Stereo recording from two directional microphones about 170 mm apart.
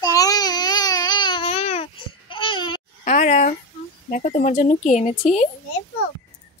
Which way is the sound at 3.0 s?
45° left (ahead or behind).